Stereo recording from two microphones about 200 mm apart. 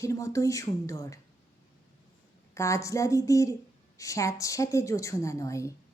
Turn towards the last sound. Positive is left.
turn(degrees=15)  # may be behind; listen again after turning